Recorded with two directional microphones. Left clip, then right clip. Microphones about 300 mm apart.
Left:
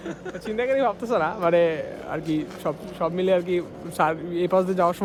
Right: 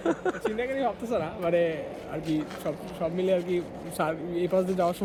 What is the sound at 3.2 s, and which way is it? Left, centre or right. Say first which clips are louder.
Speech: left 4 dB; left.